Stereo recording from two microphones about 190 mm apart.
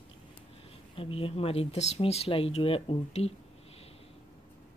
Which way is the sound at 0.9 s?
30° left (ahead or behind).